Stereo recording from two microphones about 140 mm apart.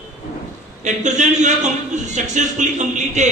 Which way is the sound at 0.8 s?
60° right (ahead or behind).